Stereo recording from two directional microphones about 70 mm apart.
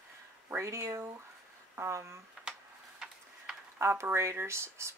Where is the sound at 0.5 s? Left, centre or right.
Right.